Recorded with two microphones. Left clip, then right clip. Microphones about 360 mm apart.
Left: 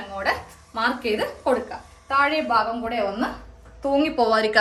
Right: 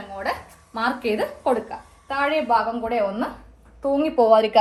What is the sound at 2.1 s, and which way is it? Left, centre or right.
Speech, centre.